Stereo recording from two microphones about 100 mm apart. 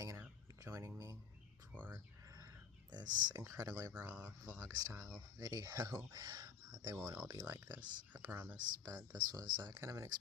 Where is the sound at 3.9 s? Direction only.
15° right (ahead or behind).